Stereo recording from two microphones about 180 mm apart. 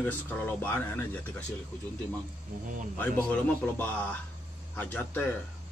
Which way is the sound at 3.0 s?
10° left (ahead or behind).